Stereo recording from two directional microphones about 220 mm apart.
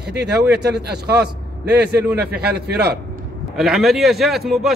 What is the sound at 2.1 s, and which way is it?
Speech, 45° right (ahead or behind).